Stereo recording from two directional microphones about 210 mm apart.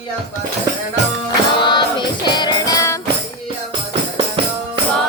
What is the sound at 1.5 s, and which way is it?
Music, 20° left (ahead or behind).